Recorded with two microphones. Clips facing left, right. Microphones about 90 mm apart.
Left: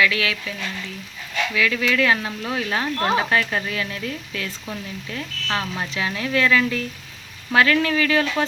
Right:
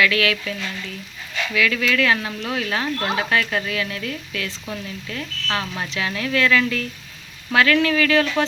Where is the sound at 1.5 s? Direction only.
25° left (ahead or behind).